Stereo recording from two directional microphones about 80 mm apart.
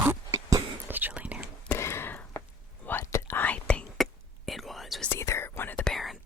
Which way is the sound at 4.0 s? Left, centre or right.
Centre.